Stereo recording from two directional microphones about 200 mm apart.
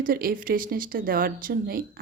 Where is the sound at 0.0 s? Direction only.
45° right (ahead or behind).